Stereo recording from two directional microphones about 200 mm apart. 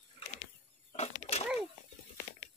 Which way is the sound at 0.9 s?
30° left (ahead or behind).